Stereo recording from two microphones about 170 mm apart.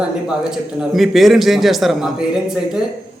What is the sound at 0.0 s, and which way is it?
Speech, 5° right (ahead or behind).